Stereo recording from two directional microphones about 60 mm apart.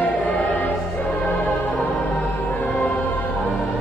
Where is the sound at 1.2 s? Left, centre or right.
Left.